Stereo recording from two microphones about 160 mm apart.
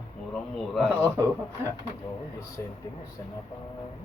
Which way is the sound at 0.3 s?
Centre (ahead or behind).